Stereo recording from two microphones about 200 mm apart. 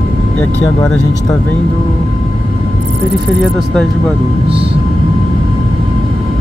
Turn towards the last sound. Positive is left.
turn(degrees=-30)  # may be behind; listen again after turning